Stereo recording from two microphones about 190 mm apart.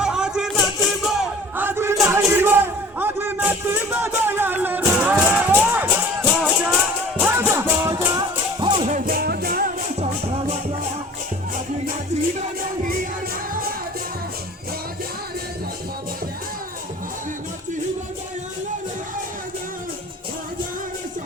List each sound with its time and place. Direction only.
0.0 s a sound: 5° right (ahead or behind)
5.7 s music: 10° right (ahead or behind)
8.6 s music: 25° right (ahead or behind)
8.9 s music: 45° right (ahead or behind)
12.1 s music: 35° right (ahead or behind)